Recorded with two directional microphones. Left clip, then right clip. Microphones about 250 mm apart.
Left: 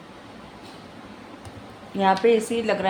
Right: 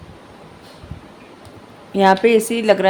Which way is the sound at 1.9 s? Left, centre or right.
Right.